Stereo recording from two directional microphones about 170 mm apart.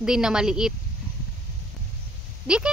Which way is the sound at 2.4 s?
5° right (ahead or behind).